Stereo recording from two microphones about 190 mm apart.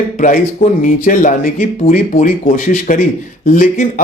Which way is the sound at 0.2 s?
45° left (ahead or behind).